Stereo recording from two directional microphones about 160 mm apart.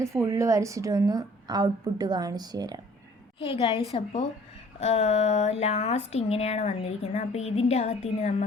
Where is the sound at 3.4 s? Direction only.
35° left (ahead or behind).